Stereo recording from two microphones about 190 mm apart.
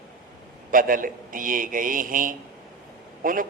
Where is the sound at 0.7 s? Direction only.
45° right (ahead or behind).